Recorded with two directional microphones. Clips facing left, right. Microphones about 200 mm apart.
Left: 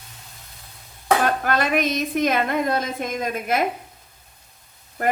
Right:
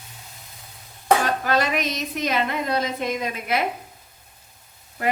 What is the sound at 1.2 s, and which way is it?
A woman's voice, 55° left (ahead or behind).